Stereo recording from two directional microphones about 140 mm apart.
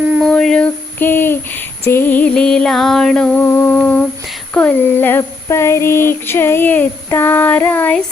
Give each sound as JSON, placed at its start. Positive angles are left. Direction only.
{"t": 0.2, "sound": "speech", "side_deg": 5}
{"t": 4.5, "sound": "child singing", "side_deg": 15}